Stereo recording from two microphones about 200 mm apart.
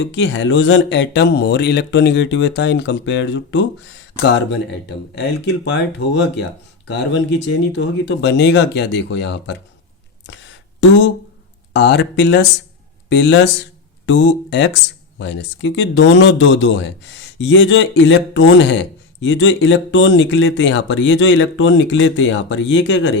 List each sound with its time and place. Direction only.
0.0 s speech: 65° left (ahead or behind)
5.1 s speech: 60° left (ahead or behind)
10.2 s a sound: 65° left (ahead or behind)
11.7 s speech: 60° left (ahead or behind)